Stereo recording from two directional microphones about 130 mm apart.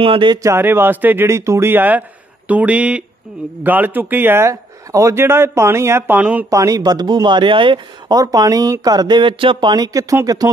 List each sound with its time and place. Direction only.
0.0 s speech: 40° right (ahead or behind)
0.4 s a man's voice: 20° right (ahead or behind)
6.5 s speech: 25° right (ahead or behind)
8.2 s a man's voice: 30° right (ahead or behind)